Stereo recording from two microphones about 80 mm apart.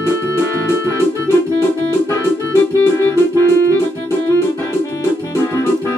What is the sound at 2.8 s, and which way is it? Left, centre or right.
Music, left.